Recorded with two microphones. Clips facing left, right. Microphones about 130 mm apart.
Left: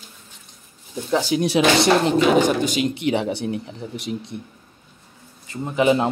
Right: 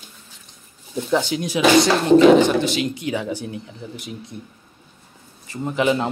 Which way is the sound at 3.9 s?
75° left (ahead or behind).